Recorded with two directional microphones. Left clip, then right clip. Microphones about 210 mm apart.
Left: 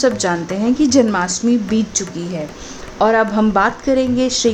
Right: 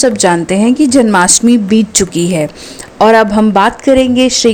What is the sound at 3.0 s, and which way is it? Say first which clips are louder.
A woman's voice: right 7 dB; 30° right (ahead or behind).